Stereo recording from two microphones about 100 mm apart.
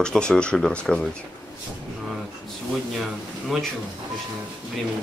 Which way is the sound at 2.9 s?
Centre (ahead or behind).